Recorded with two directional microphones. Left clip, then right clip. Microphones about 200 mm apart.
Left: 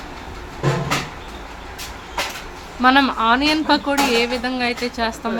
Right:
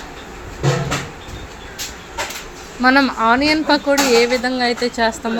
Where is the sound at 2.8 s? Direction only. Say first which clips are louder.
Right 1 dB; 10° right (ahead or behind).